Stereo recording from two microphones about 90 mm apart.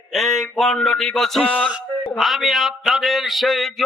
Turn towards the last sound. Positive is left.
turn(degrees=0)  # may be behind; listen again after turning